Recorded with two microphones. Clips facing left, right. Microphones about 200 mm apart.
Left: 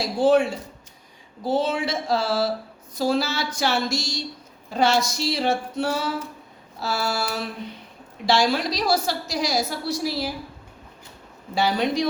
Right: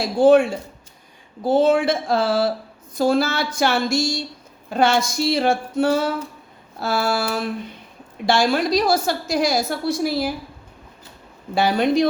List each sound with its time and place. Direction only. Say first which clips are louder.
0.0 s a woman's voice: right 5 dB; 50° right (ahead or behind)
11.5 s a woman's voice: right 4 dB; 55° right (ahead or behind)